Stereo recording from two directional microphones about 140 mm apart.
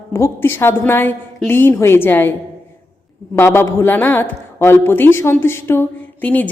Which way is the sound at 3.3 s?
15° left (ahead or behind).